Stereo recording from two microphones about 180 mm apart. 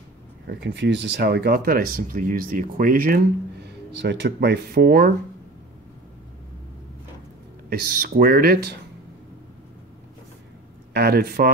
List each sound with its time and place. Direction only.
0.5 s speech: 70° right (ahead or behind); by 3.2 s 55° right (ahead or behind)
3.6 s speech: 75° right (ahead or behind); by 5.1 s 60° right (ahead or behind)
7.7 s speech: 55° right (ahead or behind)
10.9 s speech: 60° right (ahead or behind)